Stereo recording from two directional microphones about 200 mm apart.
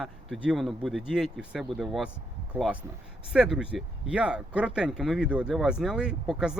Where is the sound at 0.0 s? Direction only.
Centre (ahead or behind).